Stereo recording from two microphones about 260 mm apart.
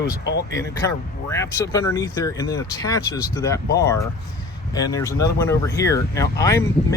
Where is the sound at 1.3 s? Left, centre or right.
Centre.